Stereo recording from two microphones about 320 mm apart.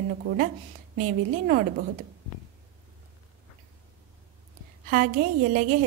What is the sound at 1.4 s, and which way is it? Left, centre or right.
Speech, right.